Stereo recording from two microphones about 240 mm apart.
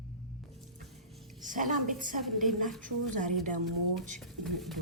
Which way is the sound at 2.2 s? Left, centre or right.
Centre.